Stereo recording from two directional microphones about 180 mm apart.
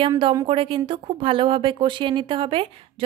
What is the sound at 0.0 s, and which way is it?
Speech, 30° right (ahead or behind).